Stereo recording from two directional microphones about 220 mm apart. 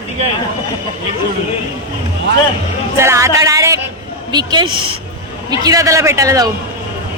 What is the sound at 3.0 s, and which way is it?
A man's voice, 10° right (ahead or behind).